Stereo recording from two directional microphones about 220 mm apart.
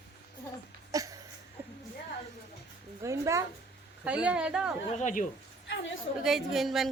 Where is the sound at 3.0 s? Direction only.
15° right (ahead or behind).